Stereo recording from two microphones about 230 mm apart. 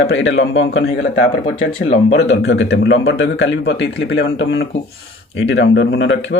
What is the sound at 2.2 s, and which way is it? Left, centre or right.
A man's voice, left.